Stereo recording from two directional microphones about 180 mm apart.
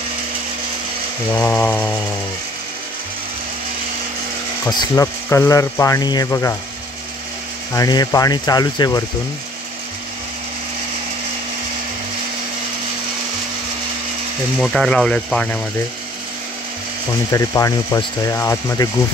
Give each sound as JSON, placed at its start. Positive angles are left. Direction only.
{"t": 1.3, "sound": "speech", "side_deg": 10}
{"t": 4.6, "sound": "speech", "side_deg": 20}
{"t": 7.7, "sound": "speech", "side_deg": 20}
{"t": 14.6, "sound": "speech", "side_deg": 0}
{"t": 17.3, "sound": "speech", "side_deg": 20}